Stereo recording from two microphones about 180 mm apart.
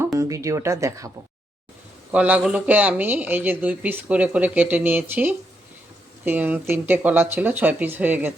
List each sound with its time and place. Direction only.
0.2 s speech: 15° right (ahead or behind)
2.1 s speech: 10° right (ahead or behind)